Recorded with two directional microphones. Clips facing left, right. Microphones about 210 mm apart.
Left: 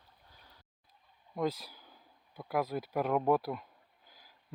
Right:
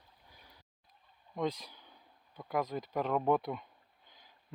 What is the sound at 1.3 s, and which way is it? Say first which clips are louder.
Speech: left 1 dB; 5° left (ahead or behind).